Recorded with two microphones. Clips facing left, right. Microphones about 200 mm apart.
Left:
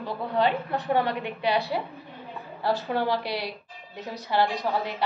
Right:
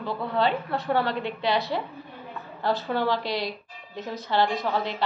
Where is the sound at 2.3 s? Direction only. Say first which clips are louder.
Left 1 dB; 15° left (ahead or behind).